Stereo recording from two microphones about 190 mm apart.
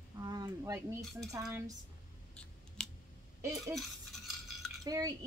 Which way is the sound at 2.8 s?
5° left (ahead or behind).